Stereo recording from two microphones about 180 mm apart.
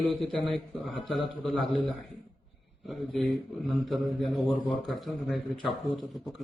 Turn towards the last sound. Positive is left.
turn(degrees=0)  # may be behind; listen again after turning